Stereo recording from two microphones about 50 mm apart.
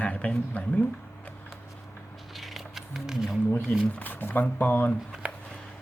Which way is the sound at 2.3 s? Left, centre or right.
Centre.